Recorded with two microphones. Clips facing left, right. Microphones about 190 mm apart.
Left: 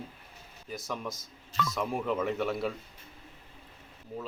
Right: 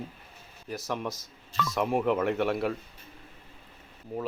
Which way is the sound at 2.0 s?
55° right (ahead or behind).